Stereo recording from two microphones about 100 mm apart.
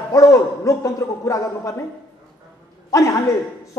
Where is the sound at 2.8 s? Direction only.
30° left (ahead or behind).